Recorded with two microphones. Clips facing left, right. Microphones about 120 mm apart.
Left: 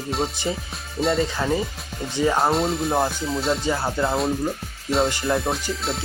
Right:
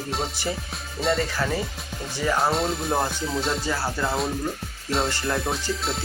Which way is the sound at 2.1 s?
25° left (ahead or behind).